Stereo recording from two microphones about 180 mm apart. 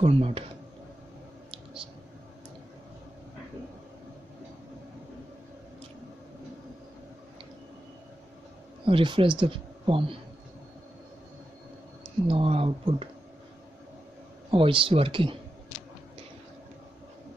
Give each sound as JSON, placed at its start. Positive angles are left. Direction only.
{"t": 0.0, "sound": "speech", "side_deg": -35}
{"t": 1.5, "sound": "whispering", "side_deg": -30}
{"t": 8.8, "sound": "speech", "side_deg": -30}
{"t": 12.3, "sound": "speech", "side_deg": -30}
{"t": 14.5, "sound": "speech", "side_deg": -30}